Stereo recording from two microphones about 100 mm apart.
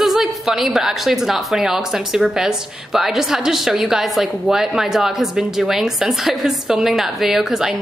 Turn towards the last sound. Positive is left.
turn(degrees=-5)  # may be behind; listen again after turning